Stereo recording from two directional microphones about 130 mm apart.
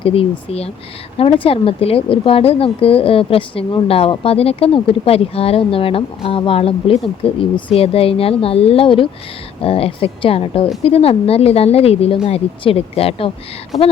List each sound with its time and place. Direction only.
0.0 s speech: 45° left (ahead or behind)